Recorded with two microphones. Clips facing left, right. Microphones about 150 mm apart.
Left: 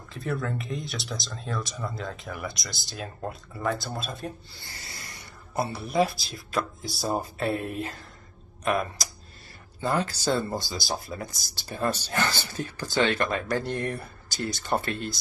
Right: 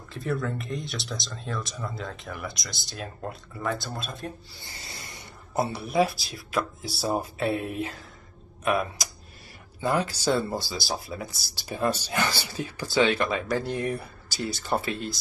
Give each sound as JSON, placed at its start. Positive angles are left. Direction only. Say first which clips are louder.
{"t": 0.1, "sound": "speech", "louder": "right 1 dB", "side_deg": 0}
{"t": 4.6, "sound": "a sound", "louder": "right 1 dB", "side_deg": -20}
{"t": 5.9, "sound": "speech", "louder": "left 1 dB", "side_deg": 0}
{"t": 9.8, "sound": "speech", "louder": "right 1 dB", "side_deg": -10}